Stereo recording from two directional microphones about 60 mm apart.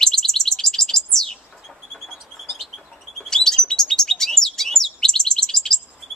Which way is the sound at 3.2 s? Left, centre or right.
Centre.